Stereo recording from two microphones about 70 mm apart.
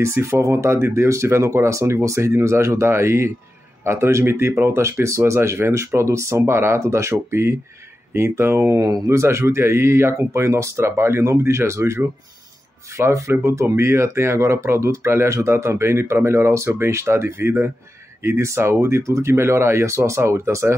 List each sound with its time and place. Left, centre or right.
0.0 s speech: right
8.8 s speech: right